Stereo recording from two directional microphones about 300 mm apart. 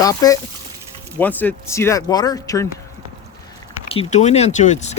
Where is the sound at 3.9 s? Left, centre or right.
Left.